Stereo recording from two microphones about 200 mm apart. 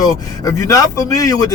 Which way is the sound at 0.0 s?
20° left (ahead or behind).